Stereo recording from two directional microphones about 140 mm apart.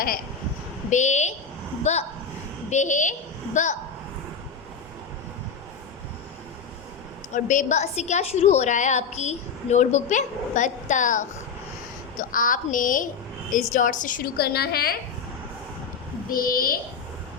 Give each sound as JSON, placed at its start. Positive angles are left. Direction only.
{"t": 0.9, "sound": "a woman's voice", "side_deg": 60}
{"t": 2.6, "sound": "a woman's voice", "side_deg": 60}
{"t": 7.3, "sound": "a woman's voice", "side_deg": 65}
{"t": 12.1, "sound": "a woman's voice", "side_deg": 75}
{"t": 14.7, "sound": "a woman's voice", "side_deg": 90}
{"t": 16.3, "sound": "a woman's voice", "side_deg": 90}